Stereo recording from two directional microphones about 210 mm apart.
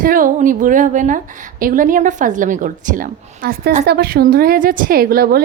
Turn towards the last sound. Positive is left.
turn(degrees=-45)  # may be behind; listen again after turning